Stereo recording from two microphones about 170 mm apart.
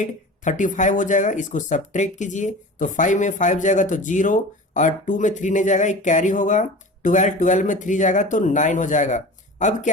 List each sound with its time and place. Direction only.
0.0 s speech: 50° left (ahead or behind)